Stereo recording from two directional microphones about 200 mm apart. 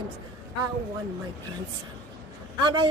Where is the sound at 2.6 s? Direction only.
20° right (ahead or behind).